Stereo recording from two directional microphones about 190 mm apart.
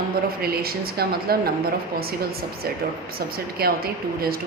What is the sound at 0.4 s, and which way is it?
Speech, 55° right (ahead or behind).